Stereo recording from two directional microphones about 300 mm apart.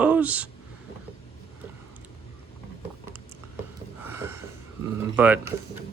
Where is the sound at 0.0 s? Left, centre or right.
Centre.